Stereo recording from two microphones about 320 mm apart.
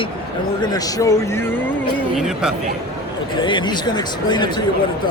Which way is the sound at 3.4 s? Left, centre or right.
Centre.